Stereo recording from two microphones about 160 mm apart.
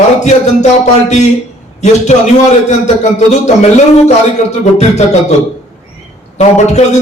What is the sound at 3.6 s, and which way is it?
Speech, 45° left (ahead or behind).